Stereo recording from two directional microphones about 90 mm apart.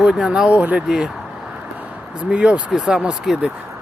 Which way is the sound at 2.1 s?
10° right (ahead or behind).